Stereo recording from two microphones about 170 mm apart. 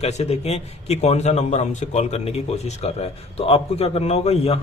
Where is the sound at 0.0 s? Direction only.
40° left (ahead or behind).